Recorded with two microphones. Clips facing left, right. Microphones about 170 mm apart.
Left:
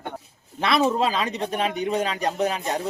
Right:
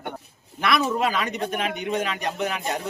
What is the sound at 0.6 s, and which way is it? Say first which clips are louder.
Speech: left 2 dB; 30° left (ahead or behind).